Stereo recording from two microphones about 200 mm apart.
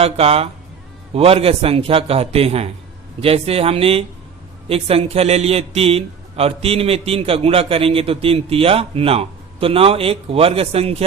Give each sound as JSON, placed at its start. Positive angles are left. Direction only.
{"t": 0.0, "sound": "a man's voice", "side_deg": -30}